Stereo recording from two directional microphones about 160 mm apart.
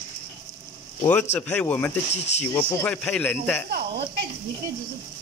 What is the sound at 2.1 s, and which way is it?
Speech, 45° left (ahead or behind).